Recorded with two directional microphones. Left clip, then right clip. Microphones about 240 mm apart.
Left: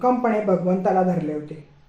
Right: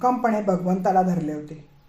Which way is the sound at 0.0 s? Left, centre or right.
Right.